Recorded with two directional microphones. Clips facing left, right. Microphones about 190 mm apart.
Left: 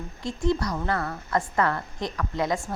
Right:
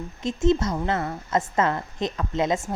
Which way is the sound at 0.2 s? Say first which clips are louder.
Right 4 dB; 20° right (ahead or behind).